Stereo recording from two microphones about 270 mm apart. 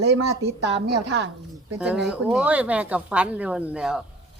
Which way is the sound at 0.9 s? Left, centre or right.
Right.